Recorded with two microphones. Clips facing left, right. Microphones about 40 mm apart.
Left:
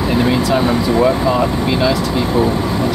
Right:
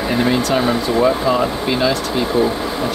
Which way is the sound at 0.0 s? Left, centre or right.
Centre.